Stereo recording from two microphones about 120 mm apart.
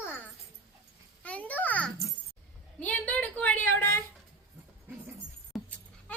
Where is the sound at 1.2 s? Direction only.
10° left (ahead or behind).